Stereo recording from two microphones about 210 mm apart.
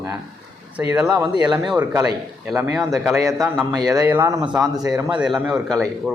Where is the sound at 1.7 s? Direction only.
10° right (ahead or behind).